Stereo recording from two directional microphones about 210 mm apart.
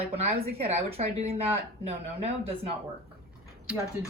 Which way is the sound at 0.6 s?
25° right (ahead or behind).